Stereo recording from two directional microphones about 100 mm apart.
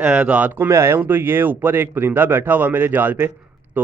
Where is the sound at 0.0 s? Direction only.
10° right (ahead or behind).